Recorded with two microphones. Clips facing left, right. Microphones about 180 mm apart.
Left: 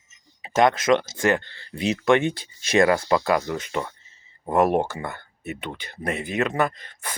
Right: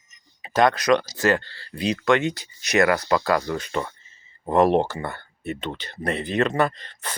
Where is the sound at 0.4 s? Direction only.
25° left (ahead or behind).